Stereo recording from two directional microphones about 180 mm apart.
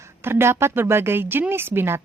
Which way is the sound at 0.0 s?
15° right (ahead or behind).